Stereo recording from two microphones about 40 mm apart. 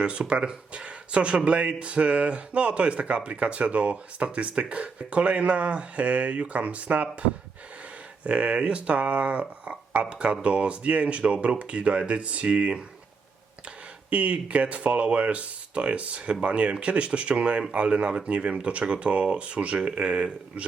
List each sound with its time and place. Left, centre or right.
0.0 s speech: right
14.1 s speech: right